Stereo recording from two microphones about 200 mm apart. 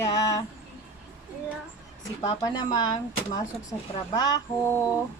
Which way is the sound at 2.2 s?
20° left (ahead or behind).